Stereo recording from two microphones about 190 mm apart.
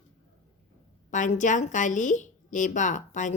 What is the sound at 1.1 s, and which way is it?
A woman's voice, 40° left (ahead or behind).